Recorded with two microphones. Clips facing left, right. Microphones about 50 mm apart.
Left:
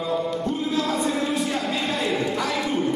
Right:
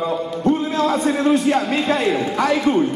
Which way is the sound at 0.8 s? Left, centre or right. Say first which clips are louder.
Right 5 dB; right.